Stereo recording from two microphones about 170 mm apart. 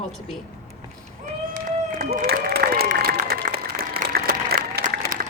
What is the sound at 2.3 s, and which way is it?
Applause, 60° right (ahead or behind).